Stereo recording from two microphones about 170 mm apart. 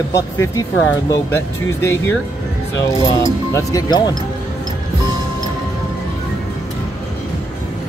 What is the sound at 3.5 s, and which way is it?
Speech, 20° left (ahead or behind).